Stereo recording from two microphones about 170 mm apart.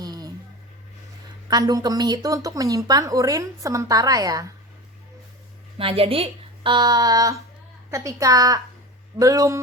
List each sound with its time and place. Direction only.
0.0 s a sound: 25° right (ahead or behind)
1.5 s speech: 25° right (ahead or behind)
5.7 s speech: 35° right (ahead or behind)